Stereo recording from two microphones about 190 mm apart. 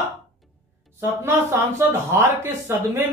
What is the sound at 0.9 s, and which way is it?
Speech, 15° right (ahead or behind).